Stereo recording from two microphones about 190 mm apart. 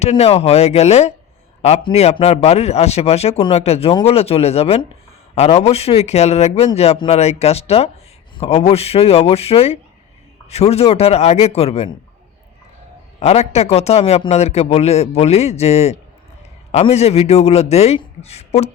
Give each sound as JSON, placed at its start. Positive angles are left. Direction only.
{"t": 0.0, "sound": "speech", "side_deg": 35}
{"t": 13.1, "sound": "speech", "side_deg": 35}